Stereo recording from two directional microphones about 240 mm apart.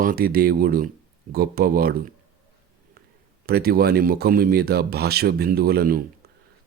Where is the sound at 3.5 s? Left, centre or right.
Right.